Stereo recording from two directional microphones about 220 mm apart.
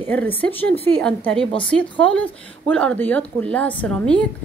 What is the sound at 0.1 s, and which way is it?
Speech, 10° left (ahead or behind).